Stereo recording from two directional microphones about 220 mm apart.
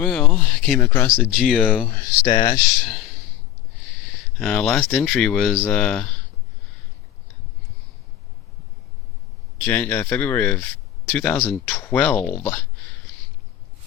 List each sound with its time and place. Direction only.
0.0 s speech: 5° left (ahead or behind)
1.1 s speech: centre (ahead or behind); by 2.6 s 20° left (ahead or behind)
2.8 s a sound: centre (ahead or behind)
4.4 s speech: 5° left (ahead or behind)
9.6 s speech: 5° left (ahead or behind)